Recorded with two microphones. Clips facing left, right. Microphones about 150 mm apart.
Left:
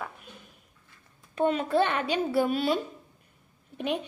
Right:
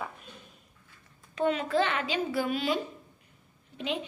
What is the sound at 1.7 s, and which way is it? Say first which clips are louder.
A child's voice: left 3 dB; 45° left (ahead or behind).